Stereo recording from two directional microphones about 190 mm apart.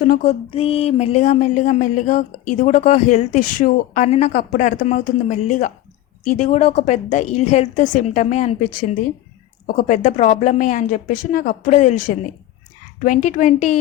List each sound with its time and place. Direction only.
0.0 s a woman's voice: 45° left (ahead or behind)